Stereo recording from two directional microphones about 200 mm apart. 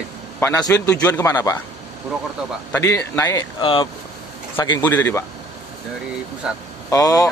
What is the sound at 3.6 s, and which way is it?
Speech, 25° left (ahead or behind).